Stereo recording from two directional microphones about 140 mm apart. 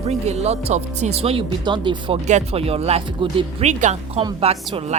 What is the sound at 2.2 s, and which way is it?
Speech, 50° right (ahead or behind).